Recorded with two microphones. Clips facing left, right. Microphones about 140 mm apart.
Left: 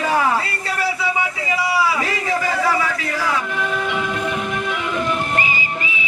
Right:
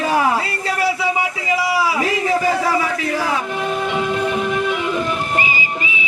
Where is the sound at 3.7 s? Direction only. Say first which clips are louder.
Right 5 dB; 25° right (ahead or behind).